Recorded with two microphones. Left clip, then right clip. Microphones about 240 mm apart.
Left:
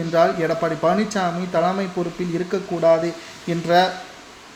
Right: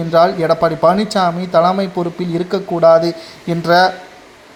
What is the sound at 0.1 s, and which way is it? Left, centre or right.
Speech, right.